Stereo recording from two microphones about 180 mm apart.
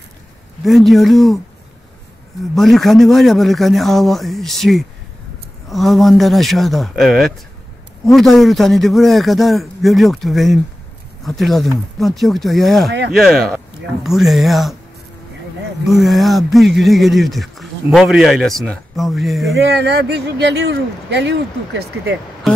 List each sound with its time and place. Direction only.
0.7 s speech: centre (ahead or behind)
2.5 s speech: centre (ahead or behind)
15.9 s speech: centre (ahead or behind)
19.6 s speech: 70° right (ahead or behind)